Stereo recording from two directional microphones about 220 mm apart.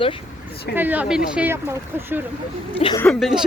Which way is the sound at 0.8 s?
10° right (ahead or behind).